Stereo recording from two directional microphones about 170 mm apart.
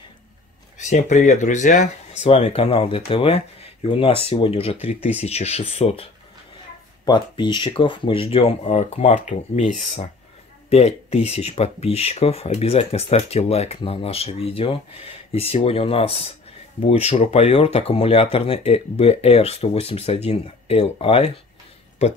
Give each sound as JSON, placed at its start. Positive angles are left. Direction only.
{"t": 0.7, "sound": "speech", "side_deg": 45}
{"t": 7.1, "sound": "speech", "side_deg": 25}